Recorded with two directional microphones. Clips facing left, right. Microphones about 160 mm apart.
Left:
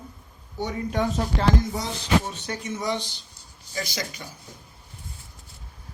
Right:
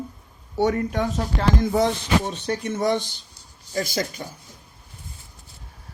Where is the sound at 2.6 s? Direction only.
55° right (ahead or behind).